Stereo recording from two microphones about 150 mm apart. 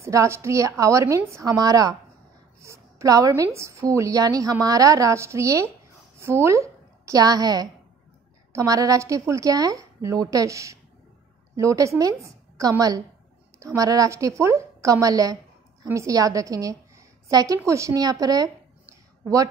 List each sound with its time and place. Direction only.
0.0 s a woman's voice: 20° right (ahead or behind)